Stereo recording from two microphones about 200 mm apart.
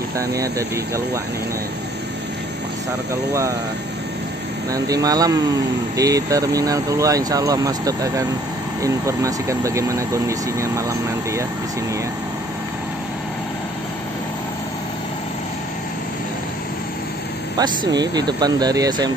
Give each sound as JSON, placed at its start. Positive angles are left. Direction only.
{"t": 0.2, "sound": "speech", "side_deg": -15}
{"t": 4.7, "sound": "speech", "side_deg": -20}
{"t": 17.6, "sound": "speech", "side_deg": -20}